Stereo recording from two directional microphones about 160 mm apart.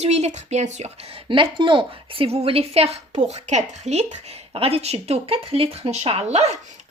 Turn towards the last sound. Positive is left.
turn(degrees=-40)  # may be behind; listen again after turning